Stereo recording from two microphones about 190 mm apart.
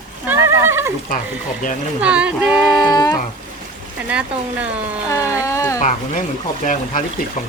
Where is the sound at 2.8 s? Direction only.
20° left (ahead or behind).